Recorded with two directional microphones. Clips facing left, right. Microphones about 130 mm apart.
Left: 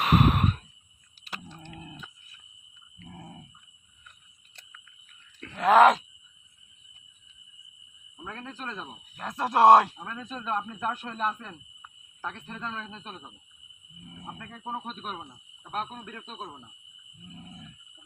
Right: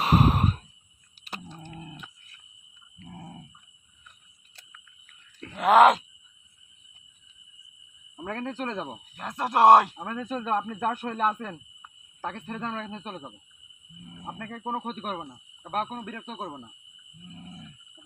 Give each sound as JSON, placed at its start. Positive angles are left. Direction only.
{"t": 0.0, "sound": "sigh", "side_deg": -35}
{"t": 1.3, "sound": "a sound", "side_deg": -20}
{"t": 3.1, "sound": "a sound", "side_deg": -10}
{"t": 5.5, "sound": "groan", "side_deg": -10}
{"t": 8.1, "sound": "speech", "side_deg": -60}
{"t": 9.1, "sound": "speech", "side_deg": 0}
{"t": 10.0, "sound": "speech", "side_deg": -50}
{"t": 14.3, "sound": "speech", "side_deg": -55}
{"t": 16.4, "sound": "speech", "side_deg": -45}